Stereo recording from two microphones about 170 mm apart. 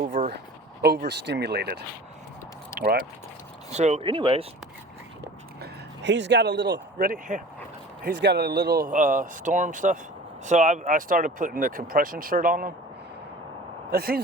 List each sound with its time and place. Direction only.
0.0 s a sound: 50° right (ahead or behind)
1.0 s speech: 85° right
2.7 s speech: 60° right (ahead or behind)
3.7 s speech: 40° right (ahead or behind)
5.5 s speech: 90° right
7.0 s speech: 50° right (ahead or behind)
8.0 s speech: 85° right; by 12.7 s 55° right (ahead or behind)
13.9 s speech: 60° right (ahead or behind)